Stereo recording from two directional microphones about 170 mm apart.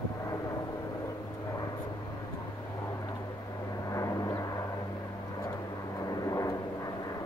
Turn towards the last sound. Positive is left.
turn(degrees=20)  # may be behind; listen again after turning